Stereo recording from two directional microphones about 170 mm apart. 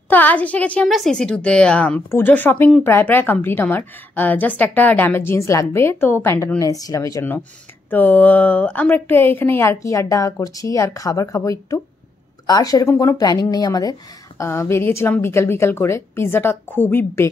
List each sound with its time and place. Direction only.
0.1 s a woman's voice: 10° left (ahead or behind)